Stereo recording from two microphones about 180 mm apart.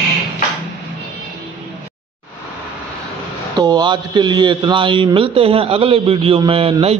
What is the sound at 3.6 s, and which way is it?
A man's voice, 25° right (ahead or behind).